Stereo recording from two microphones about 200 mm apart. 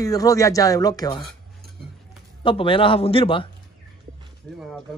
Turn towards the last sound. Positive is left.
turn(degrees=5)  # may be behind; listen again after turning